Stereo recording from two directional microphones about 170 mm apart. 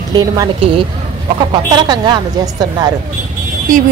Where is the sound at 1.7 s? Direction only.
25° right (ahead or behind).